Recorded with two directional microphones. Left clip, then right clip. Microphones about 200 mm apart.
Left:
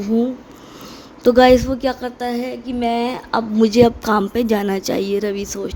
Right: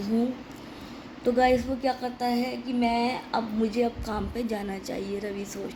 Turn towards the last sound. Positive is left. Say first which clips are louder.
# left 11 dB
turn(degrees=50)  # may be behind; listen again after turning